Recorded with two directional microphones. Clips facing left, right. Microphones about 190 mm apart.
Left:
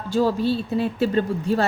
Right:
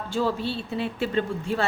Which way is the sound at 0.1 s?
40° left (ahead or behind).